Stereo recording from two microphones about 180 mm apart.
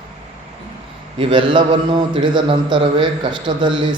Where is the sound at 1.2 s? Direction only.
25° right (ahead or behind).